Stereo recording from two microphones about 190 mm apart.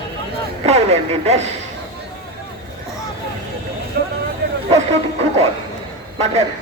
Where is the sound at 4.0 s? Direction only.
50° right (ahead or behind).